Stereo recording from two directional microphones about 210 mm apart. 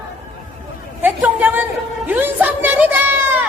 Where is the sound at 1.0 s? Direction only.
10° right (ahead or behind).